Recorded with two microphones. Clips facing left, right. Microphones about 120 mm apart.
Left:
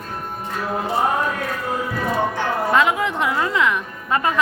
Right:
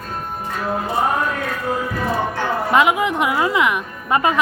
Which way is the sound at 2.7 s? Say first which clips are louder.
Right 4 dB; 15° right (ahead or behind).